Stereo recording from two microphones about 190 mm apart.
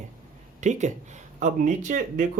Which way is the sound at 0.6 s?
40° right (ahead or behind).